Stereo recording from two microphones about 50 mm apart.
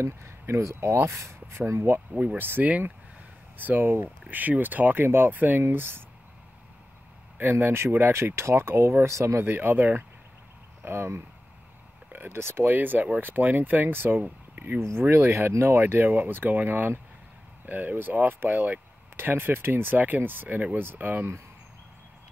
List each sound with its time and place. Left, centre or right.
0.0 s speech: right
1.7 s speech: right
2.1 s speech: right
5.6 s speech: right
7.3 s speech: right
9.0 s speech: right
9.4 s speech: right
10.8 s speech: right
12.3 s speech: right
14.8 s speech: right
19.3 s speech: right